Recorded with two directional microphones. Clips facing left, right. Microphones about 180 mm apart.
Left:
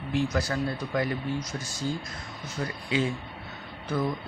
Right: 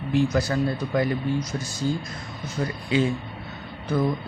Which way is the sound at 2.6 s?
30° right (ahead or behind).